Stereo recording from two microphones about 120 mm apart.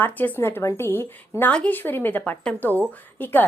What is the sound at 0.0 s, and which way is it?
Speech, 15° left (ahead or behind).